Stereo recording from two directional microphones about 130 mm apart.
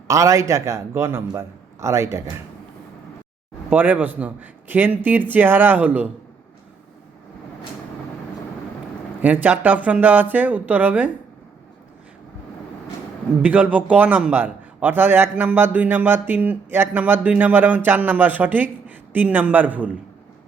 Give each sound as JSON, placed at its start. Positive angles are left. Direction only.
{"t": 0.1, "sound": "a man's voice", "side_deg": -25}
{"t": 3.7, "sound": "a man's voice", "side_deg": -10}
{"t": 9.2, "sound": "a man's voice", "side_deg": -15}
{"t": 13.4, "sound": "a man's voice", "side_deg": -10}